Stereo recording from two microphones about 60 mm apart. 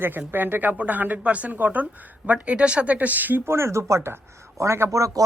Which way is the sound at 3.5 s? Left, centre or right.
Right.